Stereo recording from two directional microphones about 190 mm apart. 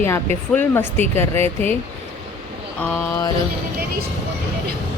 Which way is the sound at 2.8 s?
15° left (ahead or behind).